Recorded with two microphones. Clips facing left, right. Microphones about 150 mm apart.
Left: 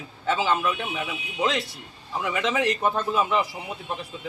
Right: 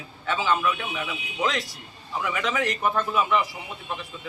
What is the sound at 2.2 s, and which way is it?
A man's voice, 20° left (ahead or behind).